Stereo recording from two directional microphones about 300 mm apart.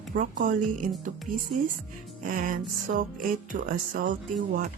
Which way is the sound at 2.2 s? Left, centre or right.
Right.